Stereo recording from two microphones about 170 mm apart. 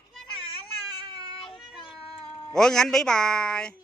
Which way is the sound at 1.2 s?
30° left (ahead or behind).